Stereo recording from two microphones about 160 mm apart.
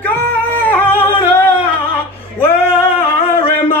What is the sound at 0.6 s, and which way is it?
Singing, 10° left (ahead or behind).